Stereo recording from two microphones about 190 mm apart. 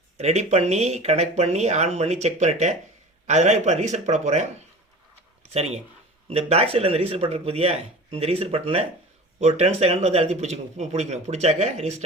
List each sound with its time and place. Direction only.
0.2 s speech: 35° right (ahead or behind)
5.5 s speech: 35° right (ahead or behind)